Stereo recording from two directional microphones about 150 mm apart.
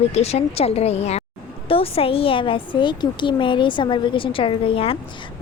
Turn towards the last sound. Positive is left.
turn(degrees=40)  # may be behind; listen again after turning